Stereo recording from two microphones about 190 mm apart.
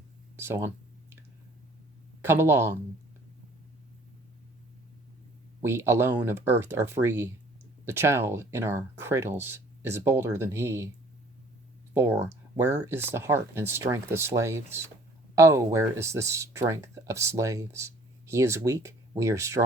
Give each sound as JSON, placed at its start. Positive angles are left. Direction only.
{"t": 0.3, "sound": "speech", "side_deg": -10}
{"t": 2.2, "sound": "speech", "side_deg": -10}
{"t": 5.6, "sound": "speech", "side_deg": -15}
{"t": 11.9, "sound": "speech", "side_deg": -10}